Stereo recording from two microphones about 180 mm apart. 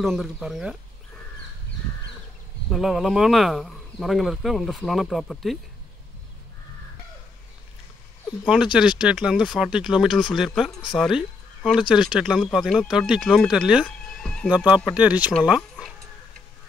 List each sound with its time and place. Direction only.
0.0 s speech: centre (ahead or behind)
2.7 s speech: centre (ahead or behind)
8.7 s speech: 5° right (ahead or behind)
13.8 s a sound: 5° left (ahead or behind)
15.0 s speech: 10° right (ahead or behind)